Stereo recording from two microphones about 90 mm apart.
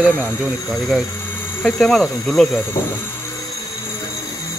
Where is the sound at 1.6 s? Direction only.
10° left (ahead or behind).